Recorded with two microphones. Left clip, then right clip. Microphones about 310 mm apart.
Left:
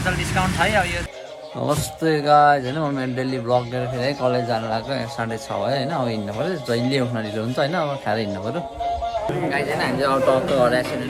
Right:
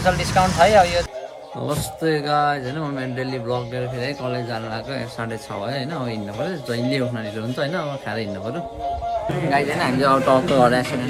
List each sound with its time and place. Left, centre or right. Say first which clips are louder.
0.0 s speech: right 4 dB; right
1.6 s speech: left 2 dB; centre
9.5 s speech: right 5 dB; centre